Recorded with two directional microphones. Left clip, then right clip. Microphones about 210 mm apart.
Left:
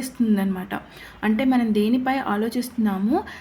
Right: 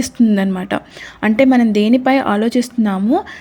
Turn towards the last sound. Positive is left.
turn(degrees=-35)  # may be behind; listen again after turning